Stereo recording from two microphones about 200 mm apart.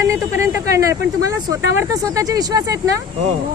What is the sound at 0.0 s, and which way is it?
Speech, 15° right (ahead or behind).